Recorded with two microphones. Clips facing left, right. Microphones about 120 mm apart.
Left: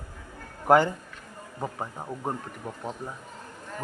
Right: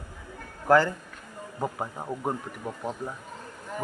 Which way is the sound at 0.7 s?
20° left (ahead or behind).